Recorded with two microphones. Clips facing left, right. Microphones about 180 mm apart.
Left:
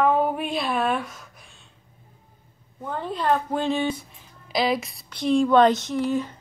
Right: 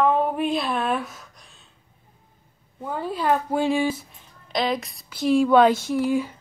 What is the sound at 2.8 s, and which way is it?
A woman's voice, 10° right (ahead or behind).